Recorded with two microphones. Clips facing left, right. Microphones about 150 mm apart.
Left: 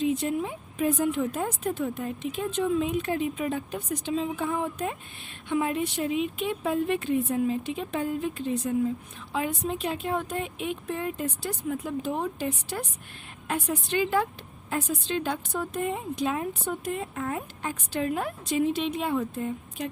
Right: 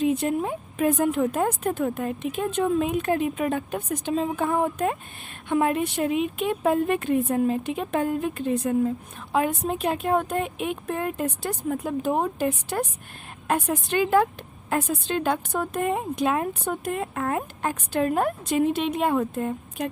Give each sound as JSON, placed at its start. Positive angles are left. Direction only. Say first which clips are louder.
{"t": 0.0, "sound": "a woman's voice", "louder": "right 3 dB", "side_deg": -55}